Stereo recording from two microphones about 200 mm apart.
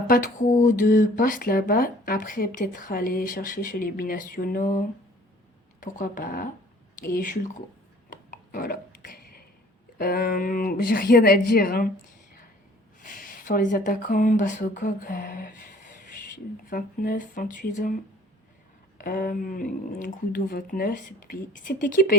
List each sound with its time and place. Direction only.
0.1 s speech: 45° left (ahead or behind)
5.8 s speech: 40° left (ahead or behind)
8.1 s a sound: 40° left (ahead or behind)
10.0 s speech: 50° left (ahead or behind)
13.0 s speech: 40° left (ahead or behind)
16.6 s speech: 45° left (ahead or behind)
19.0 s speech: 45° left (ahead or behind)